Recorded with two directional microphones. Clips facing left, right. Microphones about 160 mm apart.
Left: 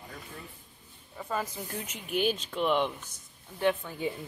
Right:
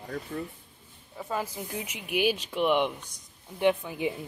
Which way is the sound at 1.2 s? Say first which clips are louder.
Right 1 dB; 5° right (ahead or behind).